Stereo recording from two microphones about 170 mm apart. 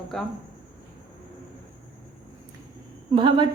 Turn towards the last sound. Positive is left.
turn(degrees=-30)  # may be behind; listen again after turning